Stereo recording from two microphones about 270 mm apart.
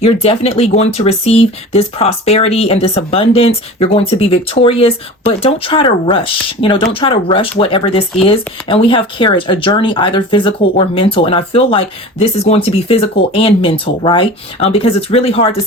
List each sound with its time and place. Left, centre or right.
0.0 s speech: left